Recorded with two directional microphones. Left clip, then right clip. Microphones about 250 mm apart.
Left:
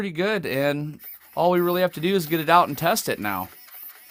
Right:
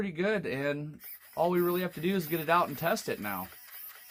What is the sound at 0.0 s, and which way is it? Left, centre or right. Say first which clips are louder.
Speech: left 6 dB; left.